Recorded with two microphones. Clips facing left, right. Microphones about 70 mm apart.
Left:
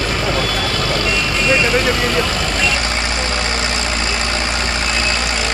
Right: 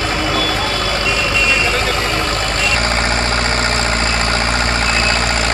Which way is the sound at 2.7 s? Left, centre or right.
Right.